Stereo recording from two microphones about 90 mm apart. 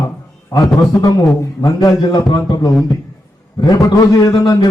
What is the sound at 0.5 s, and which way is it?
Speech, 45° left (ahead or behind).